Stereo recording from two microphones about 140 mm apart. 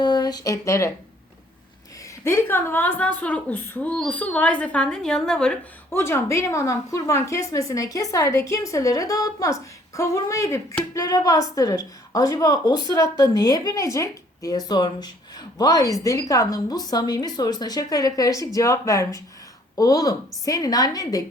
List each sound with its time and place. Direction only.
0.0 s speech: 30° left (ahead or behind)
2.2 s a woman's voice: 20° left (ahead or behind)
5.9 s a woman's voice: 20° left (ahead or behind)